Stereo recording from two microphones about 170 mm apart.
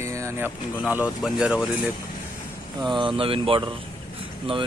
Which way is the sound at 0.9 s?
5° right (ahead or behind).